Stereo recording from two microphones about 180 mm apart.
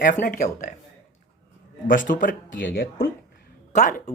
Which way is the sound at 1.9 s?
50° left (ahead or behind).